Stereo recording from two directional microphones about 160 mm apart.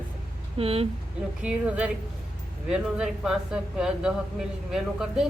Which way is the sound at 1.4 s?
5° right (ahead or behind).